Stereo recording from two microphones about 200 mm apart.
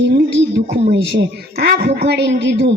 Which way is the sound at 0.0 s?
60° right (ahead or behind).